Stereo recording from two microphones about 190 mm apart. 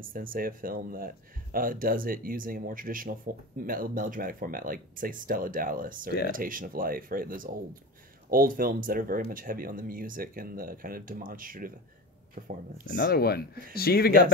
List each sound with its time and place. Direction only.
0.0 s speech: 45° right (ahead or behind)
12.9 s speech: 55° left (ahead or behind)